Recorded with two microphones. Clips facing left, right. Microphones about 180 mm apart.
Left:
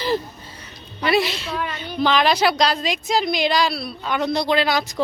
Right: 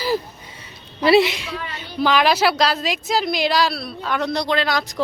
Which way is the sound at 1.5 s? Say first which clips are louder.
Left 4 dB; 50° left (ahead or behind).